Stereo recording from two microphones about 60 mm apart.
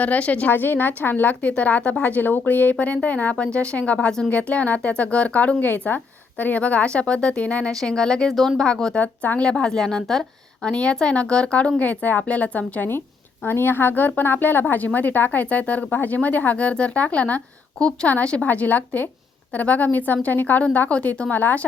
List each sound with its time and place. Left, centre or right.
0.0 s a woman's voice: left
9.0 s a woman's voice: left
9.5 s a woman's voice: centre
13.4 s a woman's voice: left